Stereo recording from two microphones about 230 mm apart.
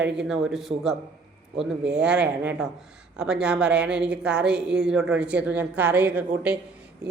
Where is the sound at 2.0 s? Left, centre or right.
Centre.